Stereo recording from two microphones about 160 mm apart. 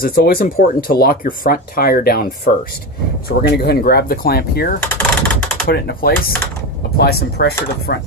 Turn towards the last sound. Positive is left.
turn(degrees=80)